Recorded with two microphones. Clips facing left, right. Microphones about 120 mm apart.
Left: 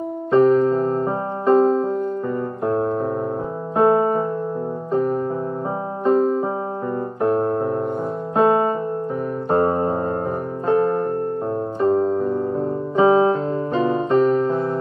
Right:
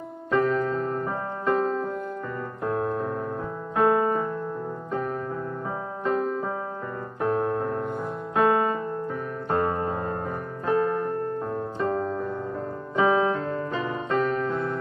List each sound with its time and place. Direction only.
0.3 s music: 30° left (ahead or behind)
2.6 s piano: 30° left (ahead or behind)
3.7 s music: 30° left (ahead or behind)
7.2 s keyboard: 30° left (ahead or behind)
7.6 s piano: 5° left (ahead or behind)
8.4 s music: 30° left (ahead or behind)
10.7 s electric piano: 30° left (ahead or behind)
11.8 s music: 30° left (ahead or behind)
12.9 s piano: 30° left (ahead or behind)